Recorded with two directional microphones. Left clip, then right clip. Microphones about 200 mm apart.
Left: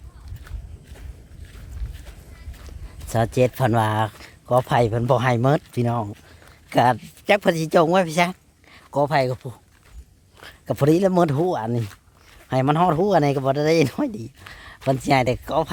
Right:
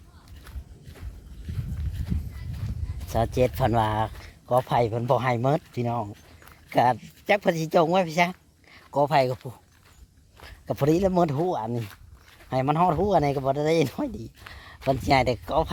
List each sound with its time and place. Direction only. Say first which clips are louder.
3.1 s speech: left 4 dB; 15° left (ahead or behind)
10.4 s speech: left 4 dB; 20° left (ahead or behind)
14.8 s speech: left 2 dB; centre (ahead or behind)